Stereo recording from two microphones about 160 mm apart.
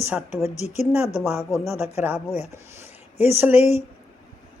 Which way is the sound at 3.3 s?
10° right (ahead or behind).